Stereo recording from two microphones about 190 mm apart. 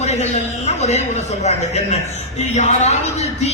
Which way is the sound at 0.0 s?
35° left (ahead or behind).